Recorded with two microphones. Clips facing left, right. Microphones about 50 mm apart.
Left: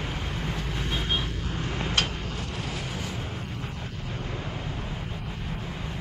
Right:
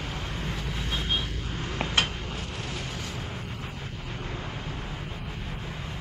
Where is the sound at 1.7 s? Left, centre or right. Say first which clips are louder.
Right 1 dB; centre.